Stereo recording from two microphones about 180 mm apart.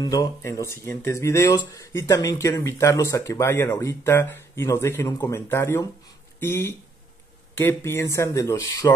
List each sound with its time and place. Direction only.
0.0 s speech: 20° left (ahead or behind)